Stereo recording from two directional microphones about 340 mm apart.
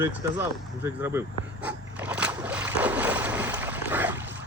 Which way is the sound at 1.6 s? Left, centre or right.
Centre.